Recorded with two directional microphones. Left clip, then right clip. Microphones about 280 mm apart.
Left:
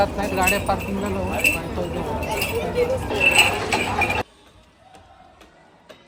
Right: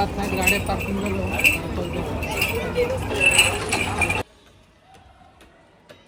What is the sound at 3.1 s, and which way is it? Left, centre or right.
Chink, left.